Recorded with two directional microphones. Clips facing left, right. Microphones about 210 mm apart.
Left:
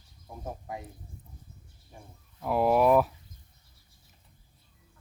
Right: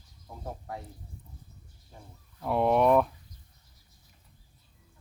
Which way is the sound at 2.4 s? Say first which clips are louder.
Even; 5° left (ahead or behind).